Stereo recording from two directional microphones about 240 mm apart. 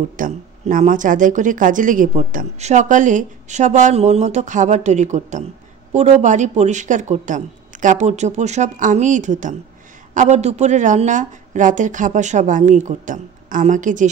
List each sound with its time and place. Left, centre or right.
0.2 s speech: right